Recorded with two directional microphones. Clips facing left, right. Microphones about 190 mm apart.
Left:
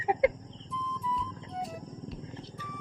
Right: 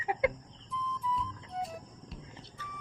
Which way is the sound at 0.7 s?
Centre (ahead or behind).